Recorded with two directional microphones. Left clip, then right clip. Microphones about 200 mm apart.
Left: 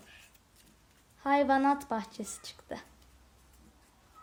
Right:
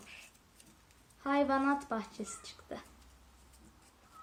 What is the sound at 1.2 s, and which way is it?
Speech, 55° left (ahead or behind).